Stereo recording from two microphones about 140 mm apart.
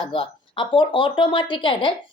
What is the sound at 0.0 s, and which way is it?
A woman's voice, 40° left (ahead or behind).